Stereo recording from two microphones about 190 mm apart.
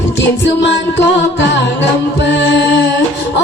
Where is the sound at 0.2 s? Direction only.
70° left (ahead or behind).